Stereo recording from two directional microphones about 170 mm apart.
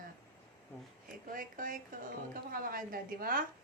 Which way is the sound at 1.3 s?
55° right (ahead or behind).